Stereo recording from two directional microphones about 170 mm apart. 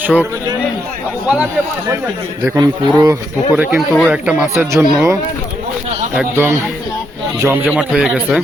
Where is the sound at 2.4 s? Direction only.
20° right (ahead or behind).